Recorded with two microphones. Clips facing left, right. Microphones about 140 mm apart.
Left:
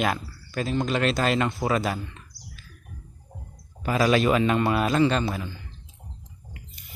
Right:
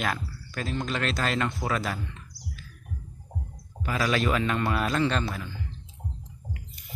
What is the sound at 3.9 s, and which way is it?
Speech, 25° left (ahead or behind).